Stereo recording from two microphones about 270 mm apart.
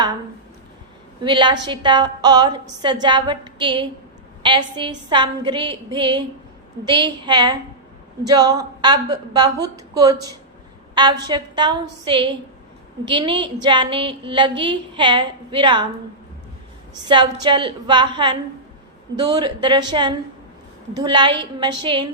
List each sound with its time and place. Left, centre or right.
1.2 s a woman's voice: centre
17.1 s a woman's voice: centre